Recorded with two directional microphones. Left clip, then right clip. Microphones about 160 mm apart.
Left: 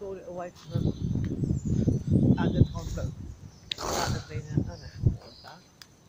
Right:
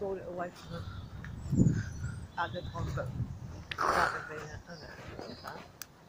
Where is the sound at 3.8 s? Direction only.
65° left (ahead or behind).